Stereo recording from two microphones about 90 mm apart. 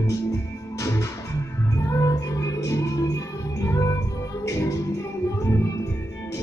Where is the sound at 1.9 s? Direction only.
35° left (ahead or behind).